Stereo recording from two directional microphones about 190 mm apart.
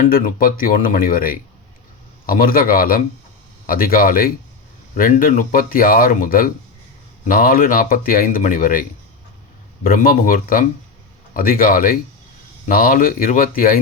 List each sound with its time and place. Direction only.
0.0 s speech: 45° left (ahead or behind)